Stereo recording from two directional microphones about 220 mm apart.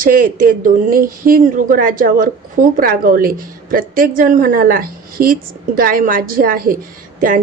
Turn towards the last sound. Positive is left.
turn(degrees=-40)  # may be behind; listen again after turning